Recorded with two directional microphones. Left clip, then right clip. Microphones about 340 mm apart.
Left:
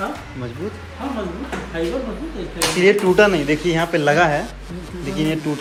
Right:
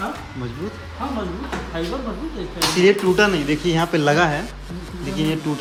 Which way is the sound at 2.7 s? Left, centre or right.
Centre.